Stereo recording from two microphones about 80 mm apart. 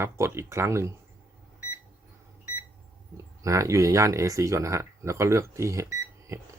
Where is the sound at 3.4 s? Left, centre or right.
Right.